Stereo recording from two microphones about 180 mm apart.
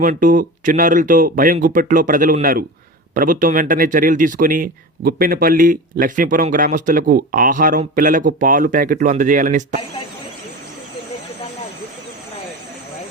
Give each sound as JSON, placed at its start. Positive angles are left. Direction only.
{"t": 0.0, "sound": "speech", "side_deg": -50}